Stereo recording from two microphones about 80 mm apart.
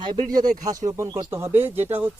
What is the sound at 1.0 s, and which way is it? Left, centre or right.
Speech, right.